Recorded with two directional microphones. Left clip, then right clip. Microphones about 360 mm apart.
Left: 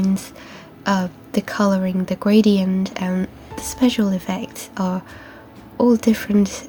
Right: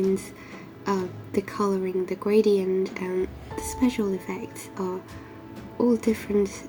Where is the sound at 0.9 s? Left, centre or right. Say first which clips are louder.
Left 6 dB; left.